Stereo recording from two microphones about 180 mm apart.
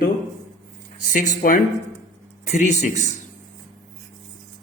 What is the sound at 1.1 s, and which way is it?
A man's voice, 50° left (ahead or behind).